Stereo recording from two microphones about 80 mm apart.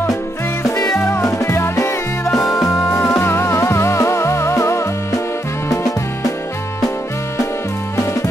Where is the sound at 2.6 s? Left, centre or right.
Left.